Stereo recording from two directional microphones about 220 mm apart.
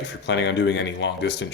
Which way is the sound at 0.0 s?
50° left (ahead or behind).